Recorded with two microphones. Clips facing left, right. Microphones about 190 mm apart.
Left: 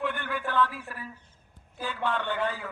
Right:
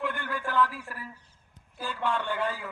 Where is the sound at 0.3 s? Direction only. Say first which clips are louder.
Right 1 dB; 10° right (ahead or behind).